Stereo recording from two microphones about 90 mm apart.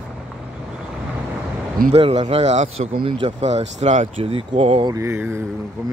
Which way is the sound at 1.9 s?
90° right.